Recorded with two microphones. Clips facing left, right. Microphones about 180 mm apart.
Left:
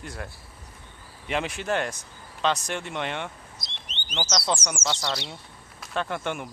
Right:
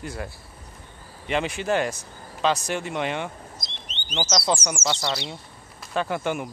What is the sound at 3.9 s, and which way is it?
Bird, 60° left (ahead or behind).